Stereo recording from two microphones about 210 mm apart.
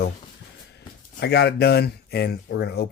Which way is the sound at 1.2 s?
50° left (ahead or behind).